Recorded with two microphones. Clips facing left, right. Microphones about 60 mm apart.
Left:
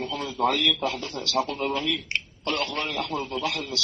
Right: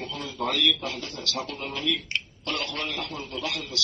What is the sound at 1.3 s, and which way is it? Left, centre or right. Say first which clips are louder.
A man's voice: left 8 dB; left.